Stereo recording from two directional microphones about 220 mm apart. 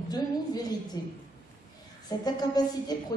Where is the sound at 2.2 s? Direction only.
20° left (ahead or behind).